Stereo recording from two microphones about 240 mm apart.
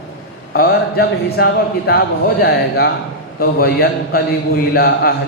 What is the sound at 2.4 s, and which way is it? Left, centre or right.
A man's voice, left.